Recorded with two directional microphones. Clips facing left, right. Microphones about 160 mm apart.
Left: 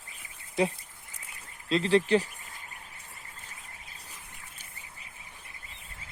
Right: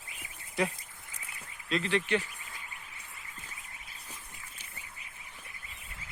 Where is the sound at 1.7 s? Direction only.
35° left (ahead or behind).